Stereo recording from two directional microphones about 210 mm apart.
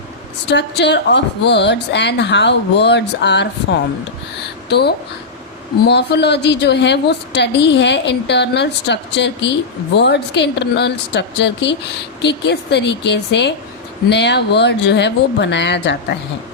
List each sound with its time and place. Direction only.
0.4 s a woman's voice: 55° left (ahead or behind)